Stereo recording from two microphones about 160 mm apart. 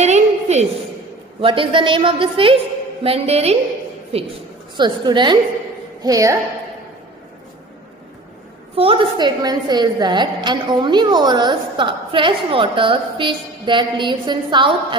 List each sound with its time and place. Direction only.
0.0 s a sound: 45° right (ahead or behind)
1.4 s a woman's voice: 30° right (ahead or behind)
4.7 s a woman's voice: 30° right (ahead or behind)
8.7 s a woman's voice: 35° right (ahead or behind)